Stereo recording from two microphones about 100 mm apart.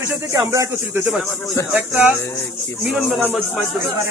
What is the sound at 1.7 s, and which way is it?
Speech, 15° right (ahead or behind).